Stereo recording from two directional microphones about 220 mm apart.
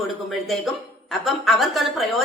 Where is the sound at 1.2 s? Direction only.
Centre (ahead or behind).